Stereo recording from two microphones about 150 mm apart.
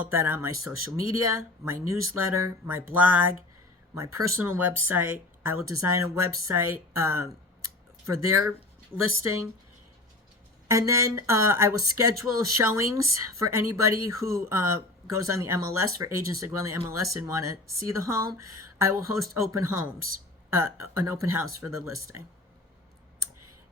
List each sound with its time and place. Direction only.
0.0 s speech: 15° right (ahead or behind)
10.7 s speech: 20° right (ahead or behind)